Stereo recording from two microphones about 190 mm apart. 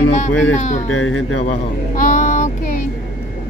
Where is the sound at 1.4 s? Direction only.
40° left (ahead or behind).